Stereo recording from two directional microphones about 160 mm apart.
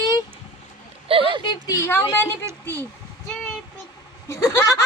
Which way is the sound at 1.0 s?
35° right (ahead or behind).